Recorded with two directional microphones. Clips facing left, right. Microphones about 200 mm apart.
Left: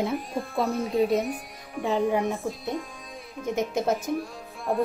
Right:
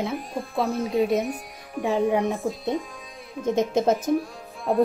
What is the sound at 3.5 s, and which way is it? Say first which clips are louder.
Speech: right 4 dB; 20° right (ahead or behind).